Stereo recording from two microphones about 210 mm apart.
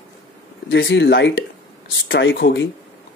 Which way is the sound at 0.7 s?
60° left (ahead or behind).